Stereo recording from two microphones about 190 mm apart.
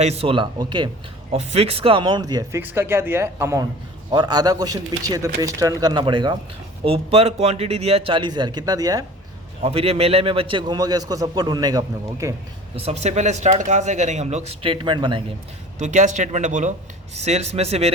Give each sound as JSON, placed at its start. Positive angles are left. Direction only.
{"t": 0.0, "sound": "a man's voice", "side_deg": -35}
{"t": 9.6, "sound": "a man's voice", "side_deg": -30}
{"t": 12.8, "sound": "speech", "side_deg": -35}
{"t": 15.8, "sound": "speech", "side_deg": -40}